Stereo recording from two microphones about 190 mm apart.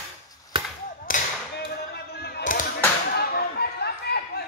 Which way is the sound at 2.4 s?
45° left (ahead or behind).